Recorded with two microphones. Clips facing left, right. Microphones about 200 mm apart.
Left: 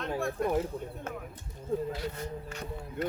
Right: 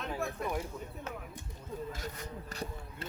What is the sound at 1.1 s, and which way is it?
Speech, 50° left (ahead or behind).